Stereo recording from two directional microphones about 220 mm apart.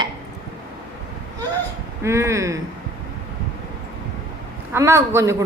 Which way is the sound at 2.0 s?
10° right (ahead or behind).